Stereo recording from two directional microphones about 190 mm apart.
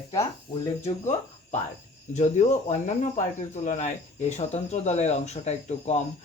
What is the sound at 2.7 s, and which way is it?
Speech, 40° left (ahead or behind).